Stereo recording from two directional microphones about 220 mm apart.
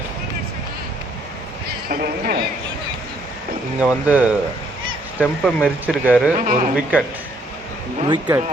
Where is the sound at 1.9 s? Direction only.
40° right (ahead or behind).